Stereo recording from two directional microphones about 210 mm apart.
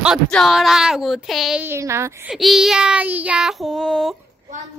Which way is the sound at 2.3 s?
Centre (ahead or behind).